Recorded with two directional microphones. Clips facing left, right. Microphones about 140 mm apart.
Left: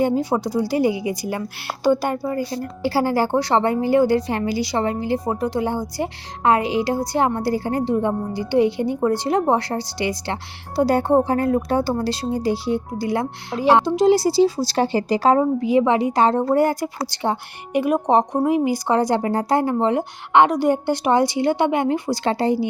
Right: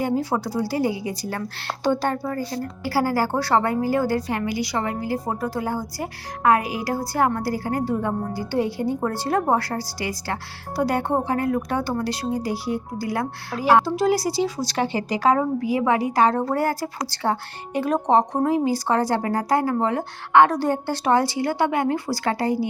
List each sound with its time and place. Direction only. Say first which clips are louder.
0.0 s a woman's voice: left 4 dB; 20° left (ahead or behind)
2.8 s a woman's voice: left 3 dB; 25° left (ahead or behind)